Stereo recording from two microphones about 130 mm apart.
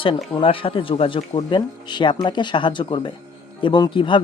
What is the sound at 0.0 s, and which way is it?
Speech, 40° left (ahead or behind).